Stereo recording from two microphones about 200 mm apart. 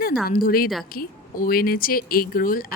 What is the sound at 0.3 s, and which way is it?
Speech, 45° left (ahead or behind).